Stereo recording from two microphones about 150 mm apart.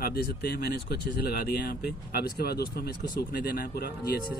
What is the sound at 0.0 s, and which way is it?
Speech, 90° left.